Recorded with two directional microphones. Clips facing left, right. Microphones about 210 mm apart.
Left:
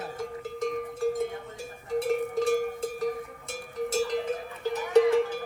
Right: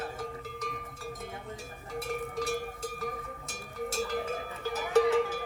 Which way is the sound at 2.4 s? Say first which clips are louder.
Left 8 dB; 50° left (ahead or behind).